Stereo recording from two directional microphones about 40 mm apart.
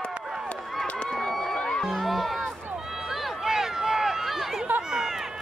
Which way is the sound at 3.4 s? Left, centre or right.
Centre.